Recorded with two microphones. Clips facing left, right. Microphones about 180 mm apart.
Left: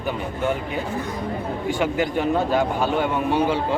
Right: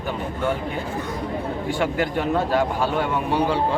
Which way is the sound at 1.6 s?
15° left (ahead or behind).